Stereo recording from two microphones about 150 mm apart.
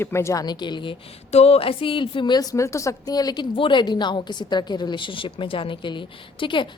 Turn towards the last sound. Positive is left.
turn(degrees=35)  # may be behind; listen again after turning